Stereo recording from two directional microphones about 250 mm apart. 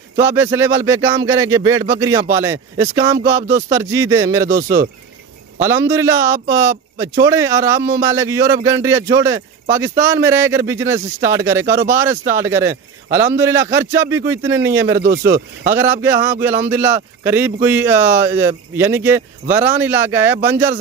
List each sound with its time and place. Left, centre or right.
0.2 s a man's voice: centre
5.6 s a man's voice: centre
15.0 s speech: right
15.7 s a man's voice: centre